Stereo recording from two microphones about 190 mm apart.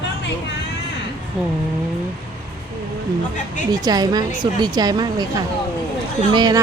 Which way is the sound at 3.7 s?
20° right (ahead or behind).